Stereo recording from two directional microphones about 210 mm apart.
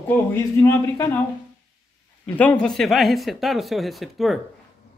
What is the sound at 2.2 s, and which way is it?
A man's voice, 5° left (ahead or behind).